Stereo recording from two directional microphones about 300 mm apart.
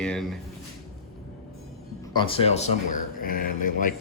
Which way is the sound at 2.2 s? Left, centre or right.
Centre.